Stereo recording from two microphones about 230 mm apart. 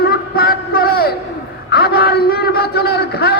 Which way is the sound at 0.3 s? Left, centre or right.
Left.